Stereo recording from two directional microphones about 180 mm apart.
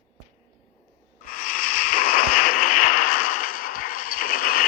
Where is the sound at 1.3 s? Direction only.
50° left (ahead or behind).